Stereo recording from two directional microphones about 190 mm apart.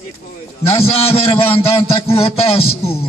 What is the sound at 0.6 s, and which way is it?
A man's voice, 30° left (ahead or behind).